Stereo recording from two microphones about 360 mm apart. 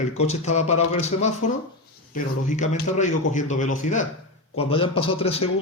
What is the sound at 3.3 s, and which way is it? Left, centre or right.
A man's voice, left.